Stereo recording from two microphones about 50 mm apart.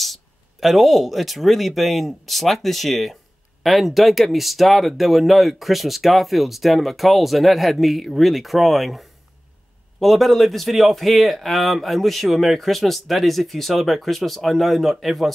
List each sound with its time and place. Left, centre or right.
0.0 s speech: centre